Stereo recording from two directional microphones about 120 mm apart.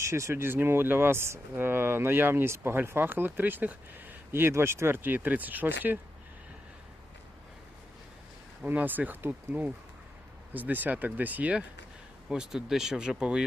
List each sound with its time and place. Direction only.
0.0 s speech: 25° right (ahead or behind)
8.6 s speech: 15° right (ahead or behind)